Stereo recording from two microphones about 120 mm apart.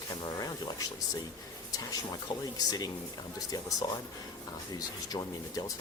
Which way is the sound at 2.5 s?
30° left (ahead or behind).